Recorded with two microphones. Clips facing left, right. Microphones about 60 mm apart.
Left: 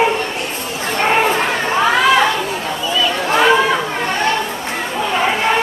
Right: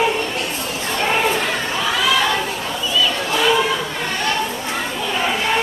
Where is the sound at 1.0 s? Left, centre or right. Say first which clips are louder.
Left 4 dB; left.